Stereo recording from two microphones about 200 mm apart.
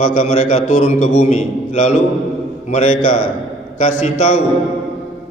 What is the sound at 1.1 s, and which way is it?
A man's voice, 35° left (ahead or behind).